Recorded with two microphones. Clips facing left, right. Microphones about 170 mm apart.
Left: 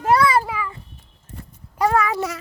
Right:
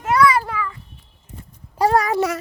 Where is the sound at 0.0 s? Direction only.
30° left (ahead or behind).